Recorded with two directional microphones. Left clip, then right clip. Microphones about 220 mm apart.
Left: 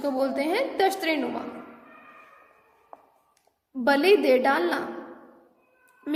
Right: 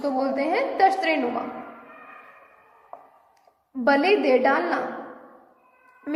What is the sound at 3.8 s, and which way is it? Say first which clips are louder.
Speech: even; 40° left (ahead or behind).